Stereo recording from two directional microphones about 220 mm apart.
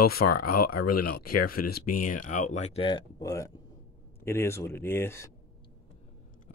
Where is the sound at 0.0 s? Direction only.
45° left (ahead or behind); by 5.3 s 10° left (ahead or behind).